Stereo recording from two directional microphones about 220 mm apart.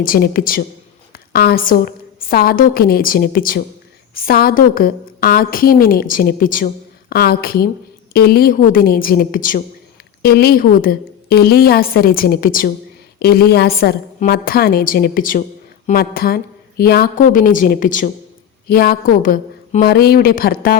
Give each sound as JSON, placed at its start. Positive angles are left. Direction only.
{"t": 0.0, "sound": "a woman's voice", "side_deg": 40}